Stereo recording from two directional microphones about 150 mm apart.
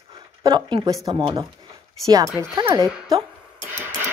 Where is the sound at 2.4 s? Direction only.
20° right (ahead or behind).